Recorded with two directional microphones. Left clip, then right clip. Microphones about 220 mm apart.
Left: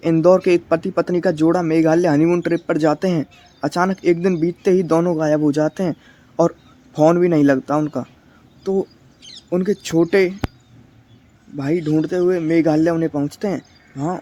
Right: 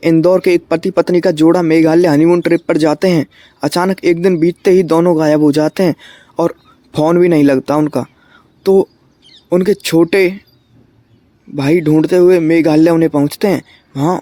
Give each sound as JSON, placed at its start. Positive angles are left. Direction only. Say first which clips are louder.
{"t": 0.0, "sound": "speech", "louder": "right 4 dB", "side_deg": -25}
{"t": 11.5, "sound": "speech", "louder": "right 8 dB", "side_deg": -30}